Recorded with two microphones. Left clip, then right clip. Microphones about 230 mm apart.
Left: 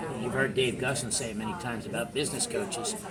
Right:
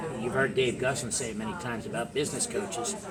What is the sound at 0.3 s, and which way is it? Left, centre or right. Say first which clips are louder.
Speech: right 1 dB; centre.